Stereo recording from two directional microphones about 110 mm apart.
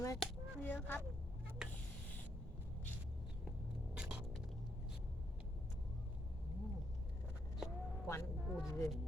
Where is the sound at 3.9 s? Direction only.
10° right (ahead or behind).